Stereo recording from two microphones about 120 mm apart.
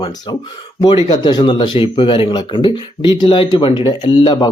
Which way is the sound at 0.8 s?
40° left (ahead or behind).